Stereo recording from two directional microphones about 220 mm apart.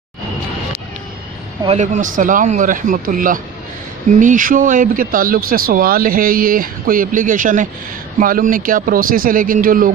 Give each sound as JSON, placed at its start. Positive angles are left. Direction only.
{"t": 1.6, "sound": "speech", "side_deg": -30}